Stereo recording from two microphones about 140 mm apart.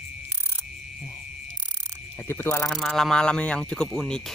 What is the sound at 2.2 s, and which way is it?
Speech, 15° left (ahead or behind).